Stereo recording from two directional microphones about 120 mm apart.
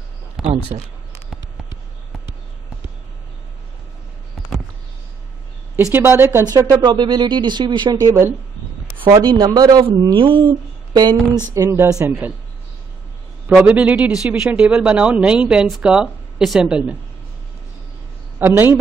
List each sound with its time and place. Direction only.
5.8 s speech: 20° right (ahead or behind)
6.5 s speech: 30° right (ahead or behind)
9.0 s speech: 35° right (ahead or behind)
10.0 s speech: 45° right (ahead or behind)
11.5 s speech: 20° right (ahead or behind)
13.6 s speech: 10° right (ahead or behind)
18.4 s speech: 20° right (ahead or behind)